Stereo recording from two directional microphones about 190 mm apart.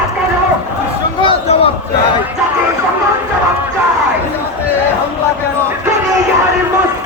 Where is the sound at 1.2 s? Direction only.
30° left (ahead or behind).